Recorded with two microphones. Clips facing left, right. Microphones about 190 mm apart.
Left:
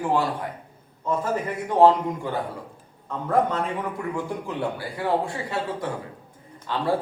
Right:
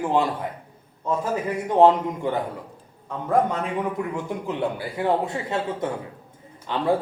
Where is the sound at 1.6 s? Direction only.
20° right (ahead or behind).